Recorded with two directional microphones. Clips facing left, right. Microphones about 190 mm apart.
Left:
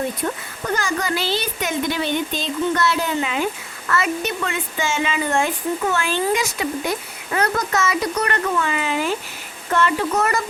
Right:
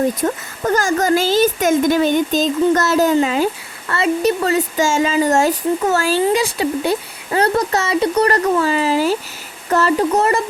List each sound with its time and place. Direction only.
0.2 s speech: 45° right (ahead or behind)